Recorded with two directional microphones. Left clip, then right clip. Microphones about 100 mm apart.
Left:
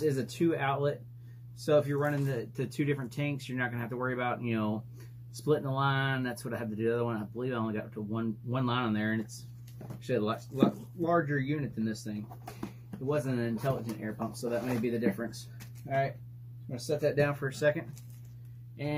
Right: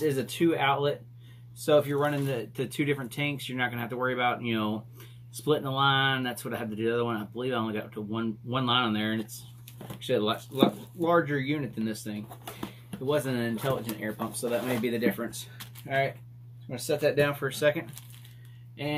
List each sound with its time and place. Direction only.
0.0 s speech: centre (ahead or behind)
2.0 s speech: centre (ahead or behind)